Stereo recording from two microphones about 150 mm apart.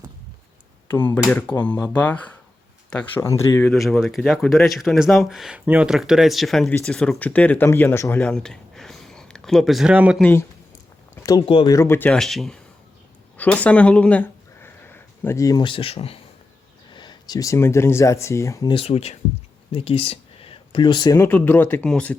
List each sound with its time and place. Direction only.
0.9 s speech: 15° left (ahead or behind)
3.7 s speech: centre (ahead or behind); by 8.2 s 15° left (ahead or behind)
8.2 s speech: 5° left (ahead or behind)
10.2 s speech: 10° left (ahead or behind)
11.1 s a sound: 20° left (ahead or behind)
11.4 s speech: 35° left (ahead or behind)
11.7 s speech: 15° left (ahead or behind)
18.7 s speech: 40° left (ahead or behind)
21.2 s speech: 15° left (ahead or behind)